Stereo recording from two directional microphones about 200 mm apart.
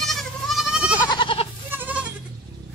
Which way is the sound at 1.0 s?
25° left (ahead or behind).